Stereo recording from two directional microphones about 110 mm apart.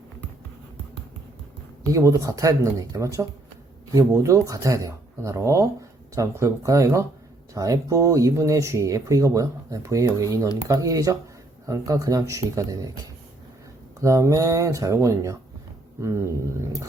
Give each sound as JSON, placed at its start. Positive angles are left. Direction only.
{"t": 1.9, "sound": "speech", "side_deg": -30}
{"t": 14.0, "sound": "speech", "side_deg": -30}